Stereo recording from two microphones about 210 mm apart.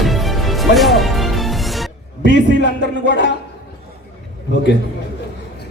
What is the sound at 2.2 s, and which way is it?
Speech, 55° left (ahead or behind).